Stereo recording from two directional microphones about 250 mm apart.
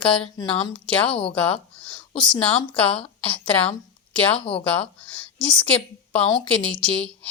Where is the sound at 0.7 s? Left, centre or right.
Centre.